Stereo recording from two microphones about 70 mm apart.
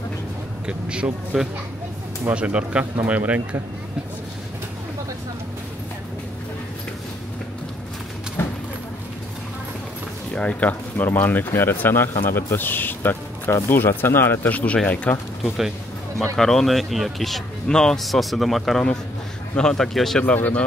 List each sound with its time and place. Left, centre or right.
0.7 s speech: centre
2.8 s speech: right
10.3 s speech: left
14.5 s speech: left
16.3 s a man's voice: centre
20.3 s speech: left